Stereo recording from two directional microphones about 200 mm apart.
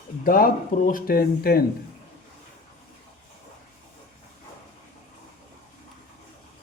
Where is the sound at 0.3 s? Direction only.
45° left (ahead or behind).